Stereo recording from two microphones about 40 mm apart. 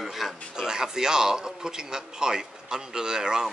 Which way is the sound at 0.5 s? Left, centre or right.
Centre.